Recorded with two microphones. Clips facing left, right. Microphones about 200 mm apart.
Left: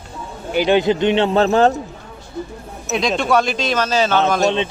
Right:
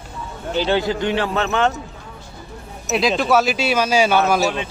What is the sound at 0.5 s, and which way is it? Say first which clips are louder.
A man's voice: left 4 dB; 15° left (ahead or behind).